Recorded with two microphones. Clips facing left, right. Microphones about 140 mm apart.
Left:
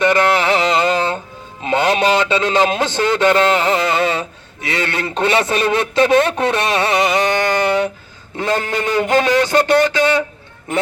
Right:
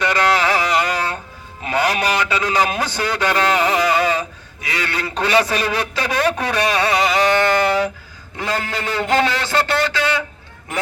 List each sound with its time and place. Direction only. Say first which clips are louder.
0.0 s music: left 3 dB; 20° left (ahead or behind)
1.6 s a man's voice: left 4 dB; 25° left (ahead or behind)